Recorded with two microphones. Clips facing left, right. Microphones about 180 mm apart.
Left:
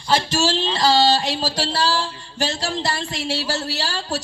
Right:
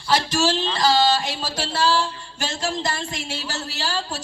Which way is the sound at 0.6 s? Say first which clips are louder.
Left 2 dB; 30° left (ahead or behind).